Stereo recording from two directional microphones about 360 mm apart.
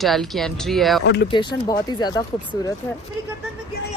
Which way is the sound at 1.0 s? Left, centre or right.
Left.